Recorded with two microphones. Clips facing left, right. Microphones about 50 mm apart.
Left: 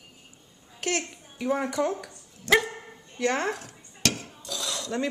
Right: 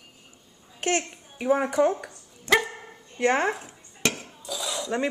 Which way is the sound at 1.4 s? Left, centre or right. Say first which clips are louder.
Right 4 dB; centre.